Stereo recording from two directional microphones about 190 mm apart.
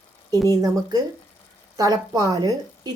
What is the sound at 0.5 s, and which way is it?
A woman's voice, 20° right (ahead or behind).